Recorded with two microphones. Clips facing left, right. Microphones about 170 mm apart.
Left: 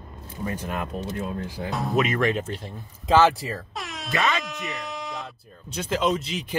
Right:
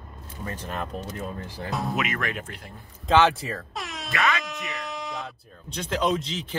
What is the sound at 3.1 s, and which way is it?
Speech, 5° left (ahead or behind).